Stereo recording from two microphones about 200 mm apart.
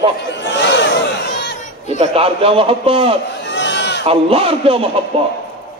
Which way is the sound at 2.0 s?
30° right (ahead or behind).